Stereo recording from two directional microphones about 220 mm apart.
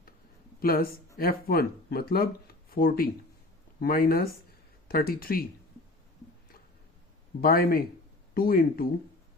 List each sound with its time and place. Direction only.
0.6 s speech: 40° left (ahead or behind)
7.4 s speech: 40° left (ahead or behind)